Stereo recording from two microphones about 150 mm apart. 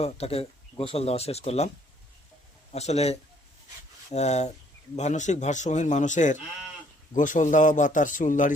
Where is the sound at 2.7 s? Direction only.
45° left (ahead or behind).